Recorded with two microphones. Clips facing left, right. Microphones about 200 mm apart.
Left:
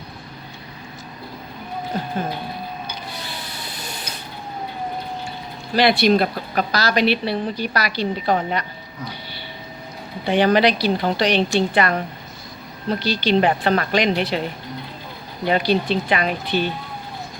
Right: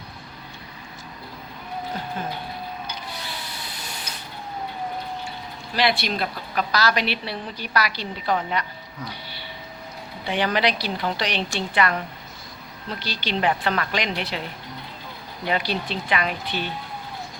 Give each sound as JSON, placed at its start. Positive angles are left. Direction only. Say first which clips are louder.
{"t": 5.7, "sound": "speech", "louder": "left 8 dB", "side_deg": 40}
{"t": 10.2, "sound": "speech", "louder": "left 7 dB", "side_deg": 35}
{"t": 15.4, "sound": "speech", "louder": "left 7 dB", "side_deg": 35}
{"t": 16.5, "sound": "speech", "louder": "left 11 dB", "side_deg": -5}